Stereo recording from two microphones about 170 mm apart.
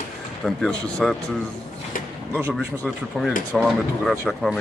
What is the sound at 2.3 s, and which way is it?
Speech, 20° right (ahead or behind).